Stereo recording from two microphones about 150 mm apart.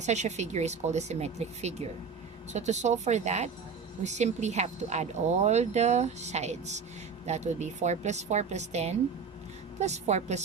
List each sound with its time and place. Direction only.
0.0 s speech: 50° right (ahead or behind)